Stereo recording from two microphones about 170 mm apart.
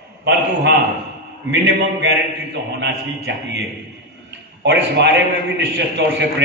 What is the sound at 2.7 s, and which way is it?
Speech, 85° right.